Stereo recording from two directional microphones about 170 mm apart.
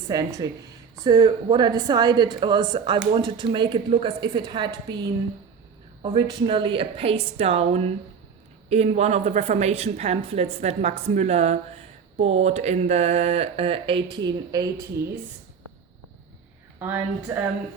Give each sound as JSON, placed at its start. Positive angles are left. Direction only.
{"t": 0.1, "sound": "speech", "side_deg": -20}
{"t": 6.0, "sound": "a woman's voice", "side_deg": -30}
{"t": 16.8, "sound": "a woman's voice", "side_deg": -10}